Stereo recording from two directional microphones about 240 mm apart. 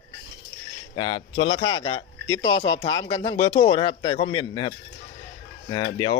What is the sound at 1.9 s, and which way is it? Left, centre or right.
Speech, left.